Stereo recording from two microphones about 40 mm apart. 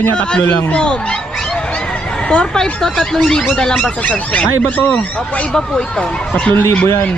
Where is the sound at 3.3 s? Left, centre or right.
Centre.